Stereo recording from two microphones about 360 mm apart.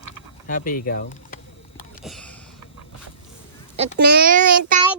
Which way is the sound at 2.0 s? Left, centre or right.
Centre.